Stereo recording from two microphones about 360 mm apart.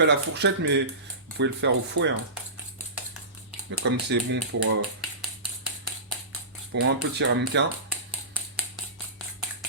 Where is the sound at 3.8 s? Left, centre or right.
Right.